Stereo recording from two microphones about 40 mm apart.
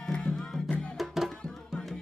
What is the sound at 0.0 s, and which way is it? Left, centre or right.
Music, centre.